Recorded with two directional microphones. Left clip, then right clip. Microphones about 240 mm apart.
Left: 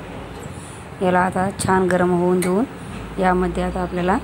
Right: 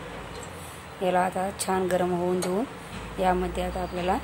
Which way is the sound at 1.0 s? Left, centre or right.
Centre.